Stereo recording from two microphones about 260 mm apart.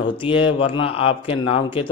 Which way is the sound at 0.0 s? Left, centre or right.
Centre.